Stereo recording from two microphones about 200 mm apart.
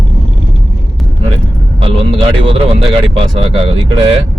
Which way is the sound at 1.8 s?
25° right (ahead or behind).